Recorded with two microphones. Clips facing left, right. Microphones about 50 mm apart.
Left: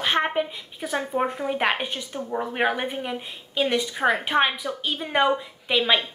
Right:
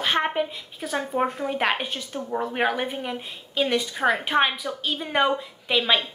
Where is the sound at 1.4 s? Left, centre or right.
Centre.